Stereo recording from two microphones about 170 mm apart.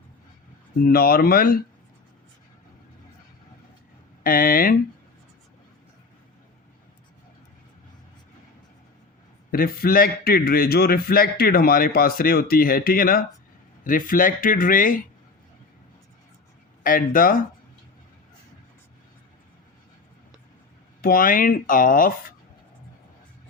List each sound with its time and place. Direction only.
0.9 s a man's voice: 60° left (ahead or behind)
4.2 s a man's voice: 60° left (ahead or behind)
9.5 s a man's voice: 60° left (ahead or behind)
16.8 s a man's voice: 55° left (ahead or behind)
21.0 s a man's voice: 55° left (ahead or behind)